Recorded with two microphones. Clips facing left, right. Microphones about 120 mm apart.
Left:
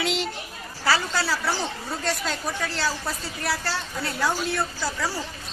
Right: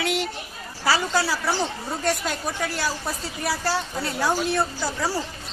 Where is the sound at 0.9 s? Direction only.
15° right (ahead or behind).